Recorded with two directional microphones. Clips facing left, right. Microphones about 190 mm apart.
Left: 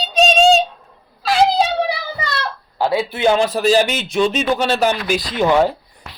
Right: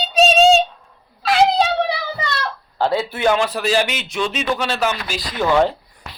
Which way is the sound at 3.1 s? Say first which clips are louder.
Left 4 dB; 25° left (ahead or behind).